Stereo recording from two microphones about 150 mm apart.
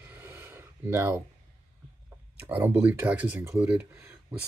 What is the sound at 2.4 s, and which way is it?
Speech, 10° right (ahead or behind).